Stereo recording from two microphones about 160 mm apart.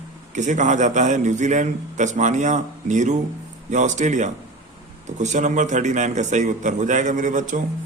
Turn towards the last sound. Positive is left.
turn(degrees=-50)  # may be behind; listen again after turning